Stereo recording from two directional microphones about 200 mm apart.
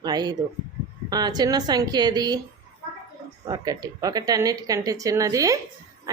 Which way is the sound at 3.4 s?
20° right (ahead or behind).